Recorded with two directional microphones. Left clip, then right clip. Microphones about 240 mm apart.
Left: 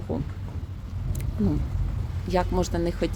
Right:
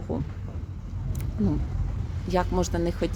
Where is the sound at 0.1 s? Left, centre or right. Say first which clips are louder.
Left 1 dB; centre.